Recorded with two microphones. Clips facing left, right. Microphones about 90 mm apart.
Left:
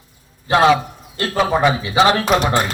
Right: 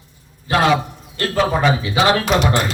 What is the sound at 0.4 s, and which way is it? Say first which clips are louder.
A man's voice: left 3 dB; 25° left (ahead or behind).